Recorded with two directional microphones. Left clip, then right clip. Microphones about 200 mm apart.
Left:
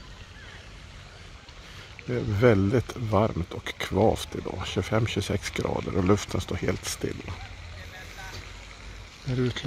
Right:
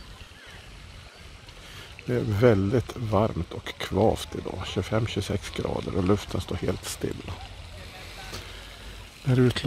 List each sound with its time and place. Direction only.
2.0 s speech: 15° right (ahead or behind)
2.4 s speech: centre (ahead or behind)
9.3 s speech: 25° right (ahead or behind)